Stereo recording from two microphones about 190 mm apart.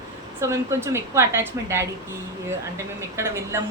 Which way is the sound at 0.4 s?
15° right (ahead or behind).